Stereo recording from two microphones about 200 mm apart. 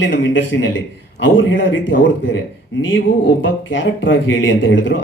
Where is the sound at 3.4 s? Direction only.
65° left (ahead or behind).